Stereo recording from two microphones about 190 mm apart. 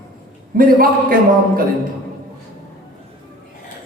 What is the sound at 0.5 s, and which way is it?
Speech, 50° right (ahead or behind).